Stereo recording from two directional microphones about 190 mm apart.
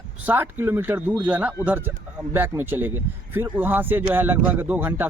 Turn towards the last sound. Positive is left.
turn(degrees=-10)  # may be behind; listen again after turning